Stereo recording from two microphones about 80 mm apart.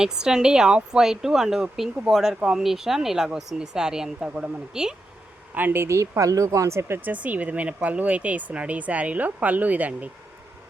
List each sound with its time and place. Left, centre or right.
0.0 s speech: centre
5.5 s speech: right
7.1 s speech: centre